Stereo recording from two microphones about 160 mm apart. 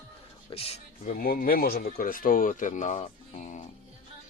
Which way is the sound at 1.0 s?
65° left (ahead or behind).